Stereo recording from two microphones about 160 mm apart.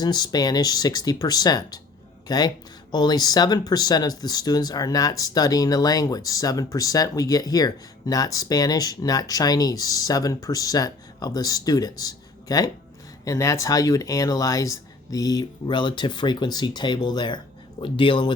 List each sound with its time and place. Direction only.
0.0 s speech: 25° left (ahead or behind)